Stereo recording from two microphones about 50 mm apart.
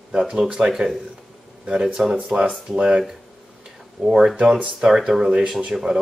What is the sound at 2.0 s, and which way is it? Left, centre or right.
Speech, centre.